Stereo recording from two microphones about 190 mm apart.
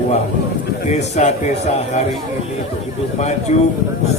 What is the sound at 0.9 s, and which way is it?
A man's voice, 35° left (ahead or behind).